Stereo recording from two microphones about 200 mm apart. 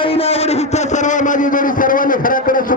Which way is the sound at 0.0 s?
30° left (ahead or behind).